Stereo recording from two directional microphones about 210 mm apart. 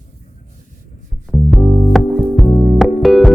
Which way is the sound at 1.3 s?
Centre (ahead or behind).